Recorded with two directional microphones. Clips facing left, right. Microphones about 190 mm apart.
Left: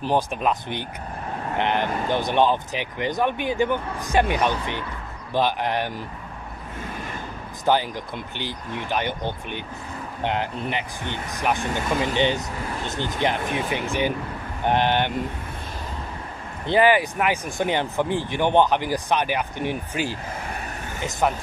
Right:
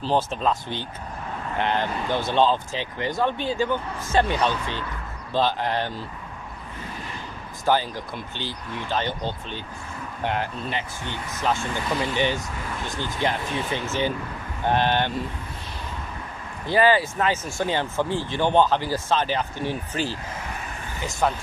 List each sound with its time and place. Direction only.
0.0 s speech: 15° left (ahead or behind)
7.6 s speech: 15° left (ahead or behind)
16.6 s speech: 20° left (ahead or behind)
21.2 s speech: 15° left (ahead or behind)